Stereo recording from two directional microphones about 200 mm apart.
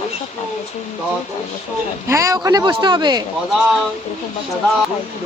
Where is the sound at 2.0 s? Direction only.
15° right (ahead or behind).